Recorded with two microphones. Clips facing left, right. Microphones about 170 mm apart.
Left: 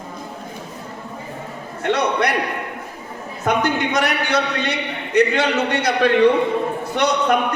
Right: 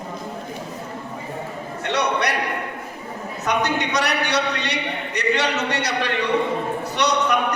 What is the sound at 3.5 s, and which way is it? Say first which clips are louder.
A man's voice: left 3 dB; 50° left (ahead or behind).